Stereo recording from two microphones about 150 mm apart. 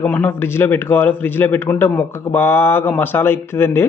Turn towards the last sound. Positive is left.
turn(degrees=15)  # may be behind; listen again after turning